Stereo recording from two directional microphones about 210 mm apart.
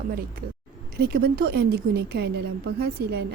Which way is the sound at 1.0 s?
45° right (ahead or behind).